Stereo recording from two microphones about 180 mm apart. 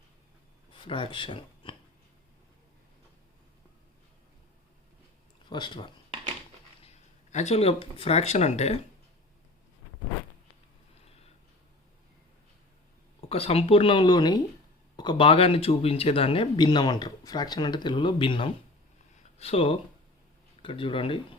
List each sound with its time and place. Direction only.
0.7 s speech: 30° left (ahead or behind)
5.5 s speech: 25° left (ahead or behind)
6.8 s speech: 40° left (ahead or behind)
13.2 s speech: 35° left (ahead or behind)